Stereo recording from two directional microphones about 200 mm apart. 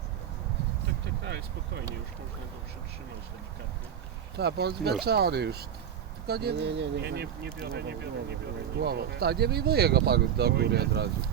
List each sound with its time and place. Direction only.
4.4 s speech: 55° right (ahead or behind)